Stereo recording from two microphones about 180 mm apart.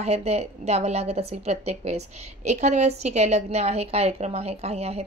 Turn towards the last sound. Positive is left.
turn(degrees=-35)  # may be behind; listen again after turning